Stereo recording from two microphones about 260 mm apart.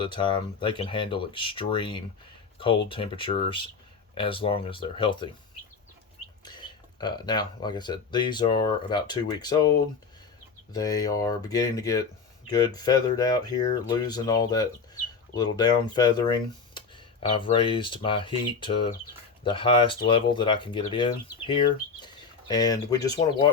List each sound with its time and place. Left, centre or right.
0.0 s speech: centre
6.4 s speech: centre
22.0 s bird: centre